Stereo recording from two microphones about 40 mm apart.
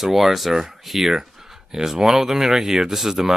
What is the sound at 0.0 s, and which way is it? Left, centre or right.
Speech, centre.